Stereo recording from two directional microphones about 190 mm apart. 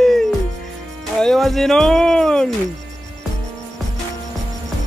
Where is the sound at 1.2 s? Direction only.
Centre (ahead or behind).